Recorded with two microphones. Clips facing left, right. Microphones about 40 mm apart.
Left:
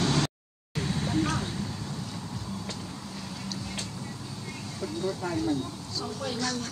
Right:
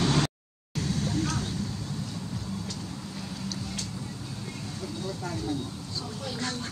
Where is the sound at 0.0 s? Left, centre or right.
Centre.